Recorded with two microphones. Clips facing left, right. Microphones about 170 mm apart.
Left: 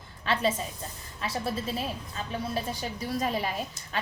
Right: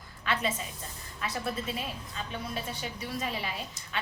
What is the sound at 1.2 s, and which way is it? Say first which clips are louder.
A woman's voice: left 2 dB; 30° left (ahead or behind).